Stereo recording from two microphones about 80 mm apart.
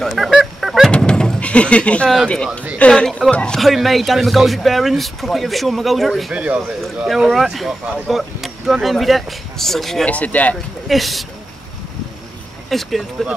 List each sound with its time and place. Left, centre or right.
0.0 s music: centre
0.9 s a sound: centre
2.2 s speech: centre
3.5 s speech: centre
6.3 s speech: centre
7.1 s speech: centre
10.0 s speech: centre
10.9 s speech: centre
12.6 s speech: centre